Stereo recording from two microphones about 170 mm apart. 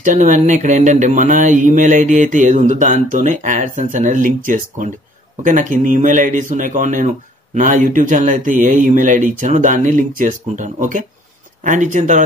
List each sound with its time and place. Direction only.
0.0 s speech: 50° right (ahead or behind)